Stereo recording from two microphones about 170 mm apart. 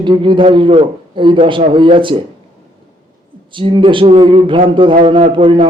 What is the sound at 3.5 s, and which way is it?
A man's voice, 30° right (ahead or behind).